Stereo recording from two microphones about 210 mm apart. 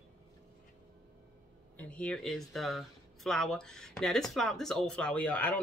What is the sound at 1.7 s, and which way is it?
Speech, 5° left (ahead or behind).